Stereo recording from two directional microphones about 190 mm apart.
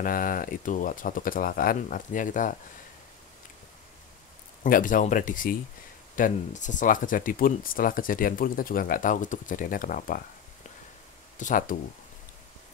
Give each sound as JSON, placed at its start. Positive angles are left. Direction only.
{"t": 0.0, "sound": "speech", "side_deg": 50}
{"t": 4.6, "sound": "speech", "side_deg": 45}
{"t": 11.3, "sound": "speech", "side_deg": 45}